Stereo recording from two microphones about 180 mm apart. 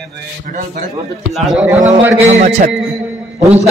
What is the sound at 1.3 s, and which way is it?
Speech, centre (ahead or behind).